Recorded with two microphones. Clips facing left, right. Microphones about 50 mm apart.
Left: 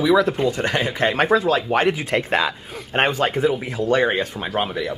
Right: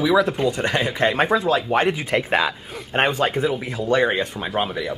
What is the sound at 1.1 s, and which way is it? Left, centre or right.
Speech, centre.